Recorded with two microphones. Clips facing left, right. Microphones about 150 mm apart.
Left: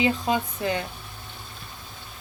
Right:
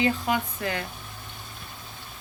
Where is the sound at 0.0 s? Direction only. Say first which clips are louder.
Left 1 dB; 20° left (ahead or behind).